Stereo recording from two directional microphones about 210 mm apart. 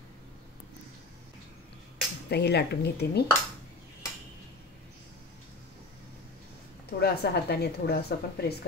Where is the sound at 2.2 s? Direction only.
50° left (ahead or behind).